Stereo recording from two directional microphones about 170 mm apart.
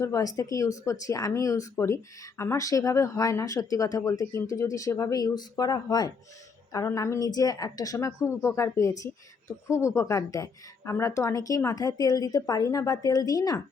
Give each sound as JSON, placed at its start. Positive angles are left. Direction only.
{"t": 0.0, "sound": "a woman's voice", "side_deg": 20}